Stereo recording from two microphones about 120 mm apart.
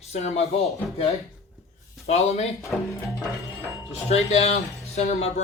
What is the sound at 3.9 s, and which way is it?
Speech, 65° left (ahead or behind).